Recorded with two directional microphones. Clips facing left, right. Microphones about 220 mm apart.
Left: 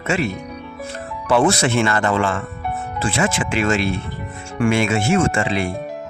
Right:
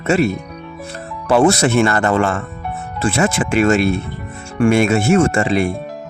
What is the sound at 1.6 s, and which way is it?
Speech, 45° right (ahead or behind).